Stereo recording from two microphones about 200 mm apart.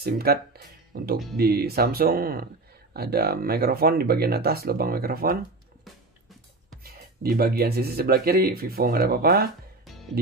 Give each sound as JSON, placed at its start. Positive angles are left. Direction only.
{"t": 0.0, "sound": "speech", "side_deg": -50}
{"t": 6.8, "sound": "speech", "side_deg": -50}